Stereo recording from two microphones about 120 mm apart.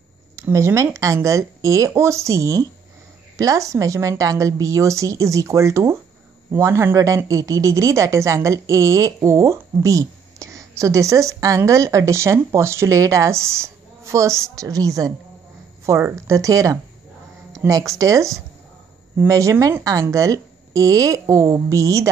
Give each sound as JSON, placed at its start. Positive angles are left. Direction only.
{"t": 0.4, "sound": "a woman's voice", "side_deg": -25}